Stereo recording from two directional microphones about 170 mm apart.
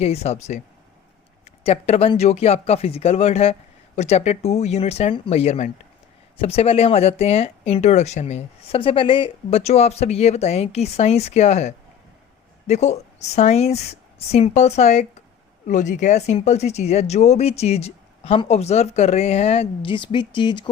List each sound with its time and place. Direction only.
0.0 s speech: 40° left (ahead or behind)